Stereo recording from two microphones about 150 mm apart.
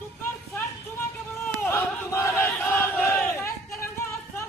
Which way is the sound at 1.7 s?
15° left (ahead or behind).